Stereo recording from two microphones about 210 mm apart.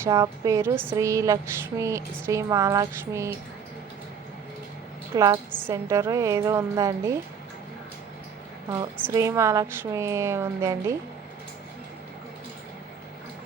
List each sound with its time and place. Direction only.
0.0 s a woman's voice: 15° right (ahead or behind)
5.1 s a woman's voice: 15° right (ahead or behind)
8.7 s a woman's voice: 15° right (ahead or behind)